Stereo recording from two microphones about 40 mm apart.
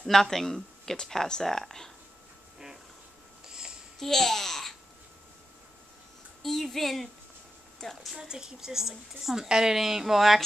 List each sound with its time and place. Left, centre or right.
0.0 s speech: centre
3.4 s a sound: centre
4.0 s babbling: centre
6.4 s speech: centre
8.2 s a woman's voice: centre